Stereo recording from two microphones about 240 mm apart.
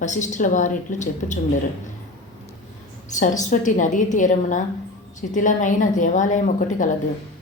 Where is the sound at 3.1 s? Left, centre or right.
Left.